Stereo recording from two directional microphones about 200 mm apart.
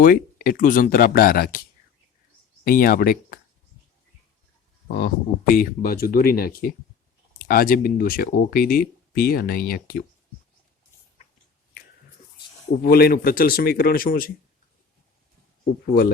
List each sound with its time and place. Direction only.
0.0 s speech: 45° left (ahead or behind)
2.6 s speech: 45° left (ahead or behind)
4.9 s speech: 45° left (ahead or behind)
12.8 s speech: 50° left (ahead or behind)